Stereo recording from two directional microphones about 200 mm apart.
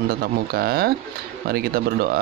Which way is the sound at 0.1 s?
50° right (ahead or behind).